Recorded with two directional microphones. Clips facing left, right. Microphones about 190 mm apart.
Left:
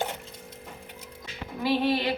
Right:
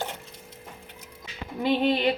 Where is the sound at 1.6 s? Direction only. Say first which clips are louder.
Right 2 dB; 20° right (ahead or behind).